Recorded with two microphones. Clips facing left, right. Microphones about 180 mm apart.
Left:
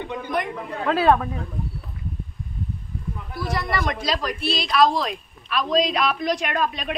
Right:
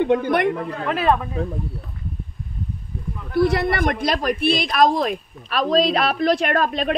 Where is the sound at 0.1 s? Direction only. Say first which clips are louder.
Right 9 dB; 70° right (ahead or behind).